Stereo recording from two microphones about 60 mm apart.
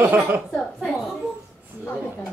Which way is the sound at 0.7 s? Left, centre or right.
Centre.